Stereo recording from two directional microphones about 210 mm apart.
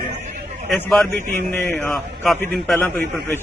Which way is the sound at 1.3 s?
10° left (ahead or behind).